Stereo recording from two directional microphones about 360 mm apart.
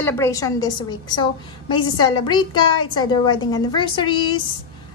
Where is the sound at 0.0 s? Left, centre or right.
Centre.